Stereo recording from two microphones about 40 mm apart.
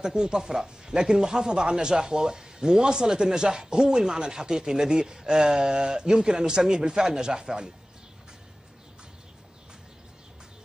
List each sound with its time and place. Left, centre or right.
0.0 s speech: centre